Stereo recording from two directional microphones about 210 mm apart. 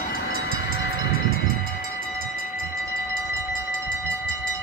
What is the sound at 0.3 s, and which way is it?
Train, 70° left (ahead or behind).